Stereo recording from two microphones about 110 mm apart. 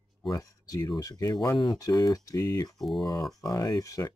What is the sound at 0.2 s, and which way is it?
Speech, 35° left (ahead or behind).